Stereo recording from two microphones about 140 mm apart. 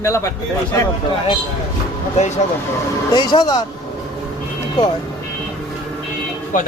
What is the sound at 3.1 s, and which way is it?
Speech, 30° left (ahead or behind).